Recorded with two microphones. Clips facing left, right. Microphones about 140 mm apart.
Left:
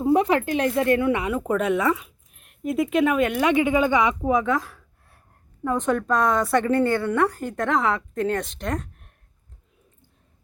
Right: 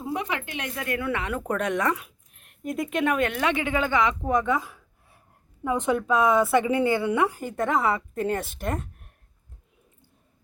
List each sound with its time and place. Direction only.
0.0 s speech: 35° left (ahead or behind)
1.3 s a woman's voice: 5° left (ahead or behind)